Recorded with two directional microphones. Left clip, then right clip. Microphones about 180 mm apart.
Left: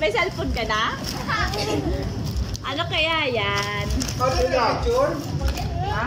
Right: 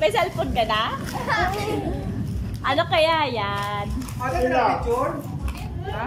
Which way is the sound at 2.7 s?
30° right (ahead or behind).